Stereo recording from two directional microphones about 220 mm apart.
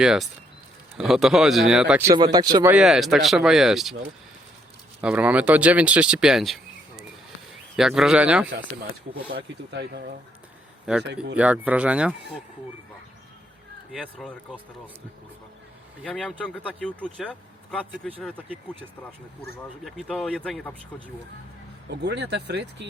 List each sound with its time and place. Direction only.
0.0 s speech: centre (ahead or behind)
2.7 s speech: centre (ahead or behind)
4.9 s speech: 5° right (ahead or behind)
9.3 s speech: 45° right (ahead or behind)
11.3 s speech: 5° right (ahead or behind)
13.9 s speech: centre (ahead or behind)
16.0 s speech: 5° left (ahead or behind)
21.8 s speech: 50° right (ahead or behind)